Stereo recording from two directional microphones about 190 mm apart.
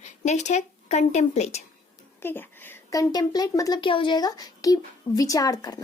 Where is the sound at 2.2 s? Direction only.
10° left (ahead or behind).